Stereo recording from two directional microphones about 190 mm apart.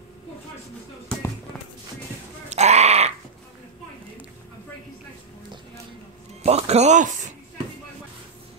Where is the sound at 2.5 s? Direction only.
35° right (ahead or behind).